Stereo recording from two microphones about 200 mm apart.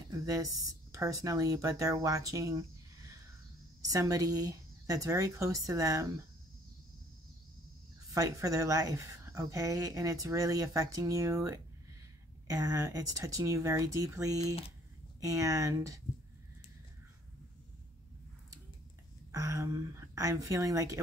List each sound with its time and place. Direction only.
0.2 s speech: 15° right (ahead or behind)
3.8 s speech: 15° right (ahead or behind)
8.1 s speech: 15° right (ahead or behind)
19.3 s speech: 15° right (ahead or behind)